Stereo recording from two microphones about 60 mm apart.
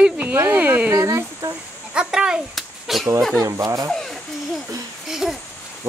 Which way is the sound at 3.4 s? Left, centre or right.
Right.